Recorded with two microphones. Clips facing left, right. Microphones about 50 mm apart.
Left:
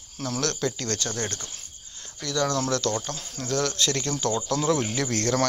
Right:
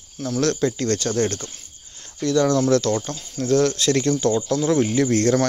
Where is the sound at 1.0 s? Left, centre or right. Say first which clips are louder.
Right 9 dB; right.